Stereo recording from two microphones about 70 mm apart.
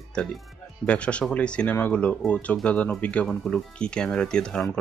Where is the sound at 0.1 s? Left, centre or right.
Centre.